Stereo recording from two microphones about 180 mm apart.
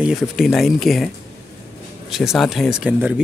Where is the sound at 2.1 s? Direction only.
Centre (ahead or behind).